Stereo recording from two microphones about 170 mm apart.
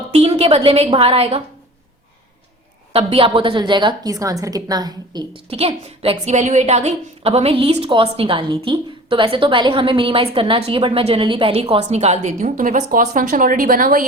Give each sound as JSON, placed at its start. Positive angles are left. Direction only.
{"t": 0.1, "sound": "a woman's voice", "side_deg": -35}
{"t": 2.9, "sound": "a woman's voice", "side_deg": -35}
{"t": 5.5, "sound": "a woman's voice", "side_deg": -35}